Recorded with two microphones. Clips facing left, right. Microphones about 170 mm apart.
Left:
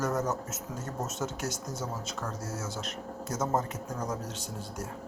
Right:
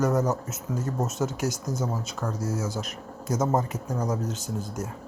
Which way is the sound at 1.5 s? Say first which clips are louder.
Right 6 dB; 25° left (ahead or behind).